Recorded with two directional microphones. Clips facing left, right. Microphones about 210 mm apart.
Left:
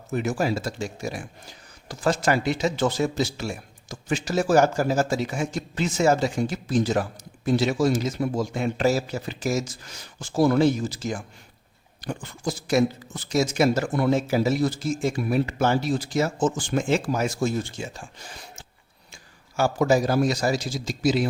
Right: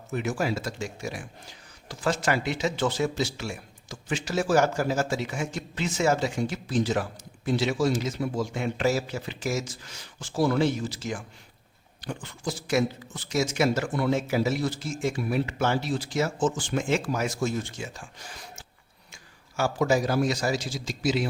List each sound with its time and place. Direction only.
0.1 s speech: 40° left (ahead or behind)
19.1 s a man's voice: 35° left (ahead or behind)